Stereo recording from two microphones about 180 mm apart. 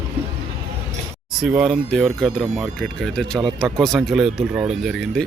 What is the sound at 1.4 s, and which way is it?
Speech, 5° right (ahead or behind).